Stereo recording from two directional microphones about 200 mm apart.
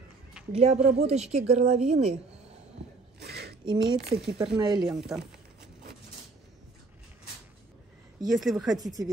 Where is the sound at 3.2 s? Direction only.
55° right (ahead or behind).